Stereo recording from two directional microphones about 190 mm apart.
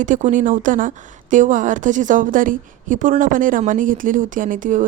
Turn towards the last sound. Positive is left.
turn(degrees=-45)  # may be behind; listen again after turning